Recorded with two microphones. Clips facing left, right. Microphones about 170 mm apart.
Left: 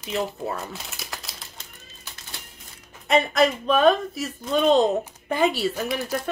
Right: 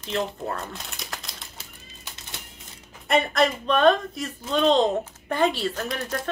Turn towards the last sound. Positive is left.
turn(degrees=5)  # may be behind; listen again after turning